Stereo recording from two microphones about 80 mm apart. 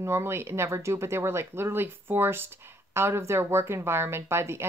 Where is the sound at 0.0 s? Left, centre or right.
Right.